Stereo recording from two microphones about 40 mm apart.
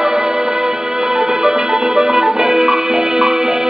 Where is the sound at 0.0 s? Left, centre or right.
Centre.